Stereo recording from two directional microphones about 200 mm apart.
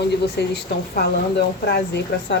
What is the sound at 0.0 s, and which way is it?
Speech, 55° left (ahead or behind).